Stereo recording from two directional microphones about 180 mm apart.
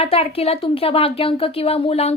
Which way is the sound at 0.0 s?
35° left (ahead or behind).